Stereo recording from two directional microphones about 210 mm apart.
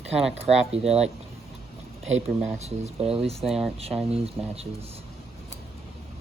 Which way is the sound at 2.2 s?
30° right (ahead or behind).